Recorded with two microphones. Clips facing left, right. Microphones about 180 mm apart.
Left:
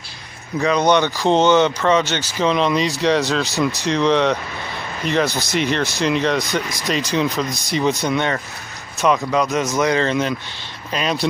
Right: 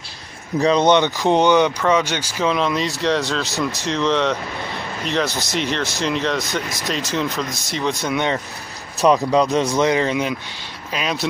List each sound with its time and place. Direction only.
0.6 s speech: 30° right (ahead or behind); by 8.2 s centre (ahead or behind)
9.3 s speech: 30° right (ahead or behind)
9.9 s speech: 10° right (ahead or behind)